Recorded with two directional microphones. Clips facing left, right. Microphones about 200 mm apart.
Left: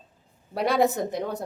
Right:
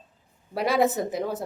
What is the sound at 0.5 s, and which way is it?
Speech, centre (ahead or behind).